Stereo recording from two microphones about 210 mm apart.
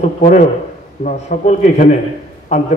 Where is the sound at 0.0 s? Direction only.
35° left (ahead or behind).